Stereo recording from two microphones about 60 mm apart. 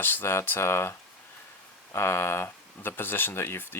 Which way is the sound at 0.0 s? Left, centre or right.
Left.